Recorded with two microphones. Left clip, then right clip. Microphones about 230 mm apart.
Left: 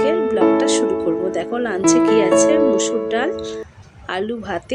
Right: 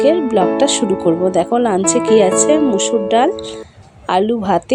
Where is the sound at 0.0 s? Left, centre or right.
Right.